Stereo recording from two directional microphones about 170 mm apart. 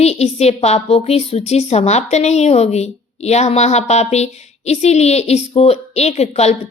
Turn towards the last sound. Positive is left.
turn(degrees=40)  # may be behind; listen again after turning